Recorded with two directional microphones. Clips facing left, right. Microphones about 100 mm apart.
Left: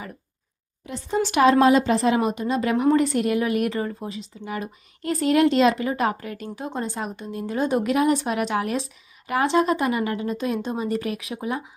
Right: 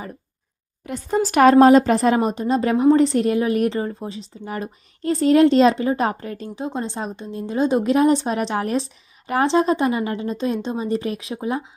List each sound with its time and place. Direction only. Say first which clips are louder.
0.9 s speech: right 3 dB; 50° right (ahead or behind); by 11.7 s 25° right (ahead or behind)